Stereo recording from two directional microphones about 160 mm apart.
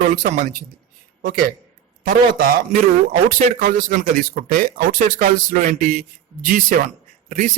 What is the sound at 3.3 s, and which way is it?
Speech, 60° right (ahead or behind).